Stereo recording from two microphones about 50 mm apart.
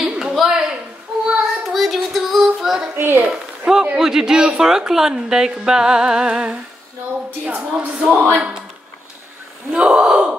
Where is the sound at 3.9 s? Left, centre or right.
Centre.